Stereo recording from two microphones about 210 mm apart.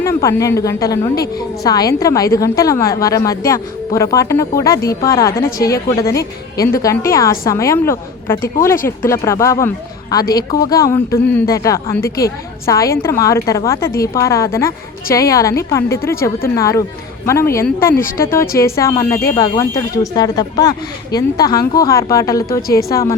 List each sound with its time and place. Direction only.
0.0 s a woman's voice: 15° left (ahead or behind)